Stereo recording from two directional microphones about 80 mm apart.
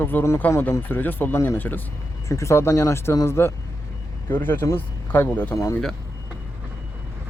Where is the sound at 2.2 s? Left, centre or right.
Left; by 5.6 s centre.